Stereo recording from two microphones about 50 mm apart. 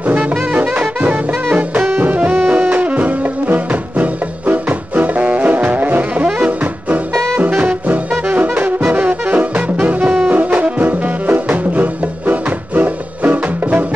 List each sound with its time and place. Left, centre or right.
0.2 s music: centre
1.9 s music: right
2.3 s brass instrument: right
7.3 s music: right
8.3 s brass instrument: right
10.2 s music: right